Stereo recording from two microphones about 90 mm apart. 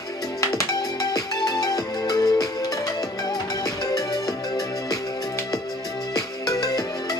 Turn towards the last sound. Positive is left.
turn(degrees=45)  # may be behind; listen again after turning